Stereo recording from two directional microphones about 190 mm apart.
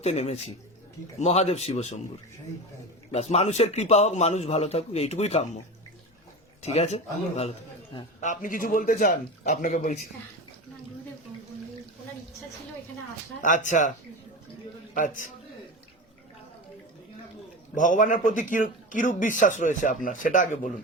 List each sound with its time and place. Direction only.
0.0 s a man's voice: 35° left (ahead or behind)
3.1 s a man's voice: 35° left (ahead or behind)
6.6 s a man's voice: 35° left (ahead or behind)
13.4 s a man's voice: 40° left (ahead or behind)
14.9 s speech: 45° left (ahead or behind)
17.7 s speech: 45° left (ahead or behind)